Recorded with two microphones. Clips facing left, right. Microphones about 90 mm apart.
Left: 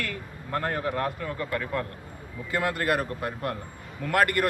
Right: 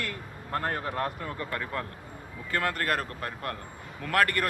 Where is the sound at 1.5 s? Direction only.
Centre (ahead or behind).